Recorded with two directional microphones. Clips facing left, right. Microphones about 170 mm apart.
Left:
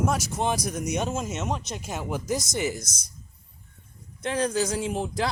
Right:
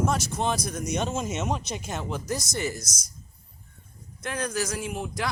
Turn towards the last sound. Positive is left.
turn(degrees=30)  # may be behind; listen again after turning